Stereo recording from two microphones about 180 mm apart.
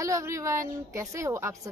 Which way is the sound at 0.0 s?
15° right (ahead or behind).